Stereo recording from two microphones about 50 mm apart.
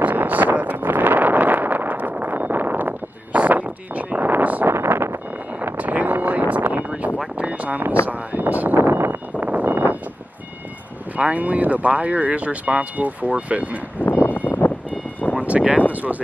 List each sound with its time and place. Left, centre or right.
0.0 s wind noise: right
4.6 s vehicle: right
5.8 s vehicle: right
7.3 s a sound: right
9.4 s vehicle: right
11.1 s speech: right
14.0 s a sound: left
15.3 s a sound: right
15.9 s speech: right